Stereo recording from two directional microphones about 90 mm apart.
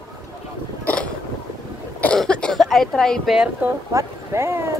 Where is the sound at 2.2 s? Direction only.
10° left (ahead or behind).